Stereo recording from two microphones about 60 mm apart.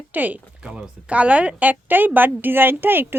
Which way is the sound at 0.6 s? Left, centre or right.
Centre.